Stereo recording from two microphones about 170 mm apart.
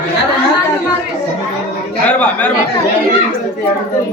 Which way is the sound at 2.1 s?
10° left (ahead or behind).